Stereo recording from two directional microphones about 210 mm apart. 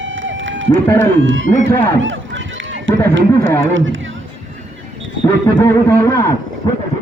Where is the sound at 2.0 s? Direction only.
65° right (ahead or behind).